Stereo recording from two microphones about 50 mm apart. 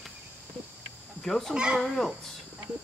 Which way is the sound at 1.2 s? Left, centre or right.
Centre.